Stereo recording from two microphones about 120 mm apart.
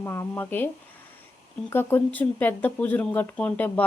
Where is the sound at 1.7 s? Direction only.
20° left (ahead or behind).